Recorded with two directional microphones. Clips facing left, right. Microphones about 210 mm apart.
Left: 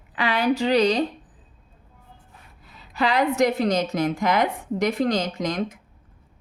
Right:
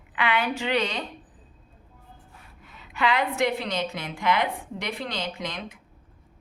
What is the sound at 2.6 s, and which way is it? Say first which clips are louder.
A woman's voice: left 3 dB; 35° left (ahead or behind).